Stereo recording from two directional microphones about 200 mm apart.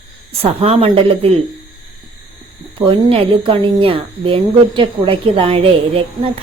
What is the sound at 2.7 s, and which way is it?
A woman's voice, 25° right (ahead or behind).